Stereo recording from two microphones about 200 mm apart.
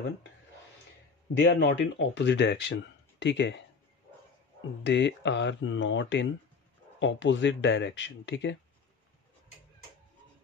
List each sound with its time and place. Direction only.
1.4 s speech: 65° left (ahead or behind)
4.8 s speech: 65° left (ahead or behind)